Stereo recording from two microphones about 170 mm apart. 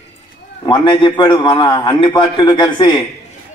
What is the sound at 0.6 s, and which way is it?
A man's voice, 30° left (ahead or behind).